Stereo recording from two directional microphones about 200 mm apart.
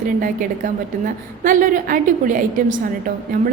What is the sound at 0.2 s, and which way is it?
A woman's voice, 40° right (ahead or behind).